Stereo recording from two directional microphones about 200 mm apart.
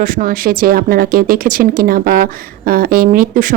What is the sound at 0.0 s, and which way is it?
Speech, 45° right (ahead or behind).